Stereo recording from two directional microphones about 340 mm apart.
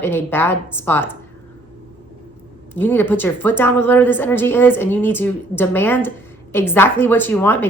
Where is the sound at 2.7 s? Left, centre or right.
Centre.